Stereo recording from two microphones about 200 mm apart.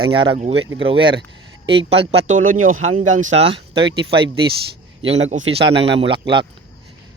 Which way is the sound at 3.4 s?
30° right (ahead or behind).